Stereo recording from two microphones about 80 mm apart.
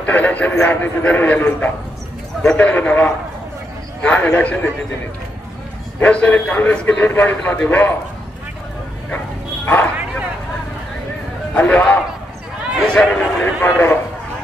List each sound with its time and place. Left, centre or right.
0.0 s a man's voice: centre
5.9 s a man's voice: centre
11.5 s a man's voice: centre